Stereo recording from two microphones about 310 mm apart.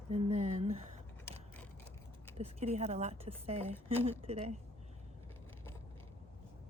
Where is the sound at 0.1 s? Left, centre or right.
Right.